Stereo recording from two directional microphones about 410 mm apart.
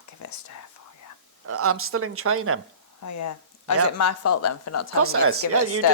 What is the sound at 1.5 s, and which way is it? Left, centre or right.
Speech, right.